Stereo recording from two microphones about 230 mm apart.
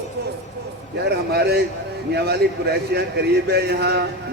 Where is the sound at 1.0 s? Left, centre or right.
Right.